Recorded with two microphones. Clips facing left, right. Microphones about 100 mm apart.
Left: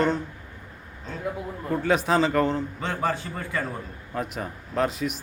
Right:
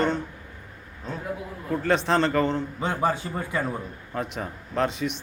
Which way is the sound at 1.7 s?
5° left (ahead or behind).